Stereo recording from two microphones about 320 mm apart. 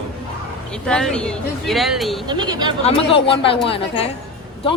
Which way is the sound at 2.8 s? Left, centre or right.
Centre.